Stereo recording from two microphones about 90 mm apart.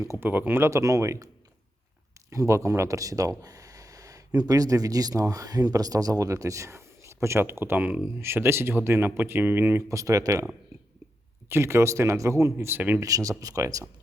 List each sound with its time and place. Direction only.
0.2 s speech: 20° right (ahead or behind)
2.3 s speech: 35° right (ahead or behind)
9.9 s speech: 40° right (ahead or behind)
11.4 s speech: 30° right (ahead or behind)
13.0 s speech: 40° right (ahead or behind)